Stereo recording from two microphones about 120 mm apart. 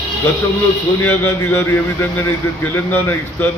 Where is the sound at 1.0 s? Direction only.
15° left (ahead or behind).